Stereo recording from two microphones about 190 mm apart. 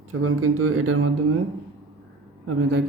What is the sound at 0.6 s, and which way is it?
Speech, 90° right.